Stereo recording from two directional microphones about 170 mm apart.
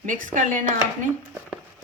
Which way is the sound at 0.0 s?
50° right (ahead or behind).